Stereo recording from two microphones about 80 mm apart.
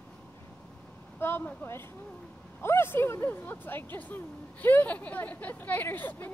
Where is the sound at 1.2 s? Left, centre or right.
Left.